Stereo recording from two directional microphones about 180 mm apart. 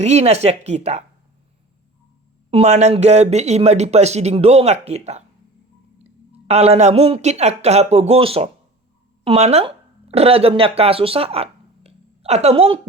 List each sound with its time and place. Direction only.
0.0 s speech: 35° right (ahead or behind)
2.5 s speech: 35° right (ahead or behind)
6.3 s speech: 35° right (ahead or behind)